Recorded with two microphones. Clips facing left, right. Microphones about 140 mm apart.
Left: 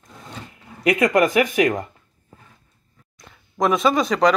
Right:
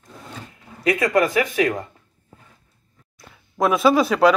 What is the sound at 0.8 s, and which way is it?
Speech, 20° left (ahead or behind).